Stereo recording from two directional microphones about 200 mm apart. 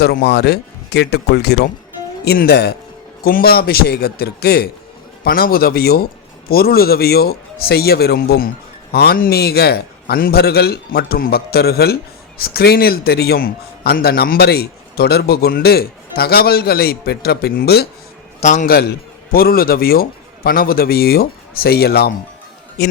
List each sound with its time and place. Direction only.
0.0 s a man's voice: 50° left (ahead or behind)
18.3 s a man's voice: 35° left (ahead or behind); by 22.1 s 50° left (ahead or behind)